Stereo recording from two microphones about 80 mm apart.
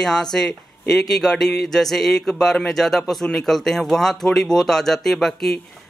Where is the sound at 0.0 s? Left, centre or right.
Centre.